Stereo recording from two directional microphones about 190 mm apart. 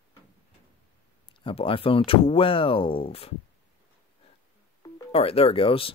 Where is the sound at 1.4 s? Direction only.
30° left (ahead or behind).